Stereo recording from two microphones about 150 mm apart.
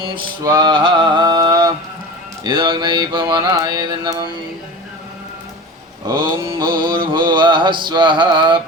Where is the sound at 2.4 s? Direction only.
30° right (ahead or behind).